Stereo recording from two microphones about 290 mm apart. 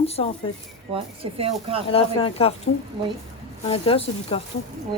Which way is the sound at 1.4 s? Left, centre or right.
Centre.